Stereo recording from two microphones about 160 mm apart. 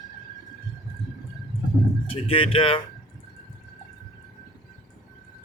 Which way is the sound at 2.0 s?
35° left (ahead or behind).